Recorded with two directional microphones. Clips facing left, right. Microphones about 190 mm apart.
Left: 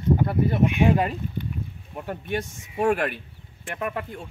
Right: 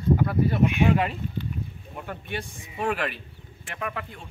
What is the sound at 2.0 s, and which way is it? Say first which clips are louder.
Speech: left 6 dB; 40° left (ahead or behind).